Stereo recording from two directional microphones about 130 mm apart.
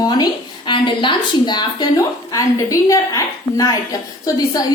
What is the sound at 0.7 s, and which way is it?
A woman's voice, 40° left (ahead or behind).